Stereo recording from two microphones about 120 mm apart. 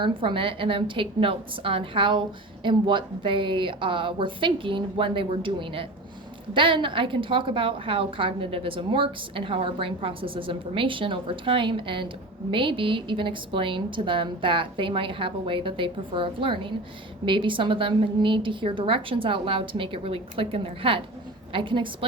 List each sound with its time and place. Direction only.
0.0 s a woman's voice: 45° right (ahead or behind)